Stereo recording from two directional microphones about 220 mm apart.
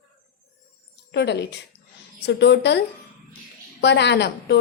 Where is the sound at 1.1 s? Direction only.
50° left (ahead or behind).